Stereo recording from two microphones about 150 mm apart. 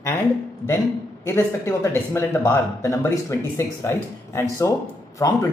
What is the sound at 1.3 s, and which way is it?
Speech, 20° left (ahead or behind).